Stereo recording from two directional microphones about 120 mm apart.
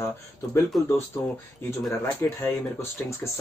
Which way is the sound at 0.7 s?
Centre (ahead or behind).